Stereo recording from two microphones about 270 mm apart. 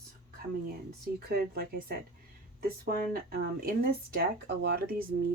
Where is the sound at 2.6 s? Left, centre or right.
Right.